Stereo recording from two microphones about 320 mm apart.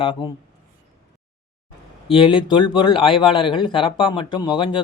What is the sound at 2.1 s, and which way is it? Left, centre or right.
A man's voice, centre.